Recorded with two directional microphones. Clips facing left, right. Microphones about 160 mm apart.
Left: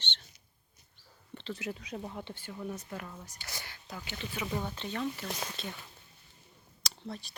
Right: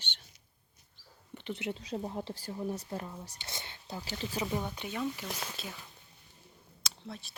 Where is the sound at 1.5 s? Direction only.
25° right (ahead or behind).